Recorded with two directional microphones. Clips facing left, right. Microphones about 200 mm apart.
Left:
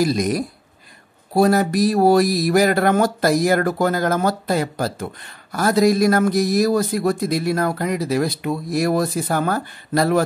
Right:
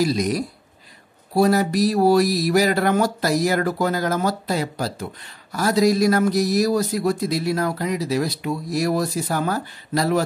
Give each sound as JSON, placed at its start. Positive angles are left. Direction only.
{"t": 0.0, "sound": "speech", "side_deg": 50}